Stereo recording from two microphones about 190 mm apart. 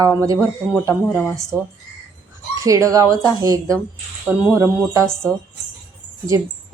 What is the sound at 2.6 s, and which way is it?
A woman's voice, 15° right (ahead or behind).